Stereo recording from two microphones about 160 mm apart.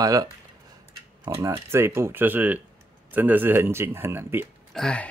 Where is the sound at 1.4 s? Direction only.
20° right (ahead or behind).